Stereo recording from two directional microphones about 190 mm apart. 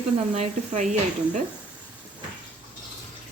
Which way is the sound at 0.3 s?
40° right (ahead or behind).